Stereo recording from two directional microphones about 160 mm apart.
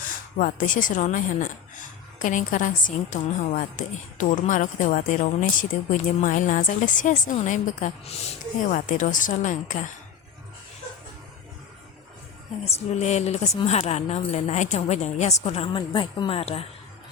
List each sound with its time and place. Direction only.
0.1 s a woman's voice: 55° left (ahead or behind)
12.6 s a woman's voice: 45° left (ahead or behind)